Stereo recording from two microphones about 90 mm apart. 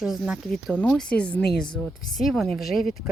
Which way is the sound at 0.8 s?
5° left (ahead or behind).